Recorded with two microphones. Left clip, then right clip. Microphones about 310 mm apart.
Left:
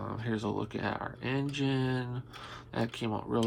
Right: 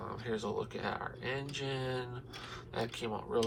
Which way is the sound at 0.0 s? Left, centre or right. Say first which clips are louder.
Left 2 dB; left.